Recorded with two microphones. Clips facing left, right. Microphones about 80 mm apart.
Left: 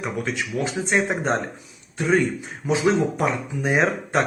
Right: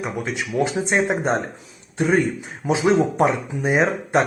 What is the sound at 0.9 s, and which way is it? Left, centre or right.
Speech, centre.